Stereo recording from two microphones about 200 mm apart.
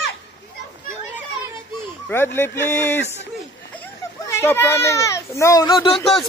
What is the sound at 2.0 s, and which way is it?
Speech, 10° left (ahead or behind).